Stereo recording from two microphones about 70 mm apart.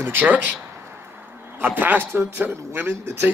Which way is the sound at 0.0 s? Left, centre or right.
Right.